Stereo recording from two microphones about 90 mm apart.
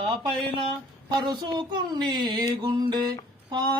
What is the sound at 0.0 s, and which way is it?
Speech, 75° right (ahead or behind).